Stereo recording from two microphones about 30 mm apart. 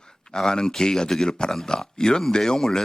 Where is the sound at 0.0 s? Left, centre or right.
Left.